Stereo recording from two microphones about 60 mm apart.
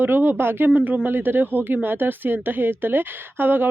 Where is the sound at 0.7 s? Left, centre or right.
Right.